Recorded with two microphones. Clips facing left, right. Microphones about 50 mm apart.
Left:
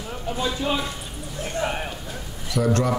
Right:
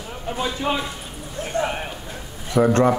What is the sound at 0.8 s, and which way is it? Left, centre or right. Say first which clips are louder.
Speech: even; centre.